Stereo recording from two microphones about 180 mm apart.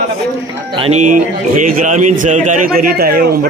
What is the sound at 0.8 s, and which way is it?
A man's voice, 35° right (ahead or behind).